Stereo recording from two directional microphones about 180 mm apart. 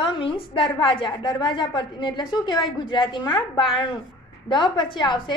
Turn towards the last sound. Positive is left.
turn(degrees=25)  # may be behind; listen again after turning